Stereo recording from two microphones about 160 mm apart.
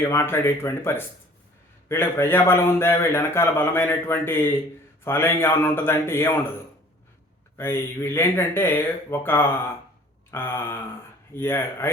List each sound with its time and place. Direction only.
0.0 s a man's voice: 15° left (ahead or behind)
7.5 s a man's voice: 15° left (ahead or behind)